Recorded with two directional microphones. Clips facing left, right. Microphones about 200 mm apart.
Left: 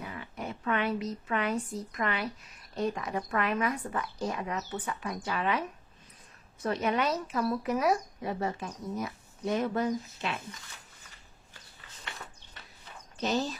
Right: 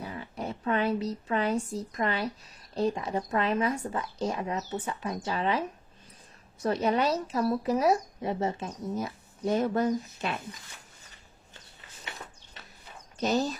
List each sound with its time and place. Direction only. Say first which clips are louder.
0.0 s a woman's voice: right 3 dB; 35° right (ahead or behind)
13.2 s speech: right 3 dB; 45° right (ahead or behind)